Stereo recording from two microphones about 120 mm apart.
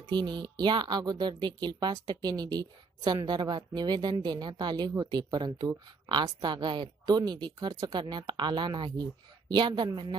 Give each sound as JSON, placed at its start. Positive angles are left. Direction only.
{"t": 0.1, "sound": "speech", "side_deg": -35}